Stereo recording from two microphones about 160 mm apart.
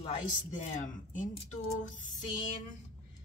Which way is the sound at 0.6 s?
50° left (ahead or behind).